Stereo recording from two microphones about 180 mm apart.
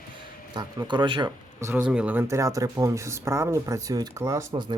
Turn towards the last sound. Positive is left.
turn(degrees=-15)  # may be behind; listen again after turning